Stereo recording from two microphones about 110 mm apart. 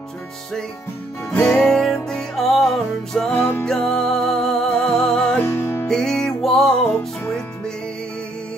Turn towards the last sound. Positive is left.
turn(degrees=10)  # may be behind; listen again after turning